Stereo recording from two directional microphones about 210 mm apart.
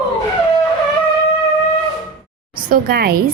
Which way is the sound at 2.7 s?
45° right (ahead or behind).